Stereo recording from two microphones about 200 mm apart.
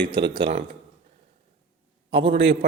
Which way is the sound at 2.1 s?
25° right (ahead or behind).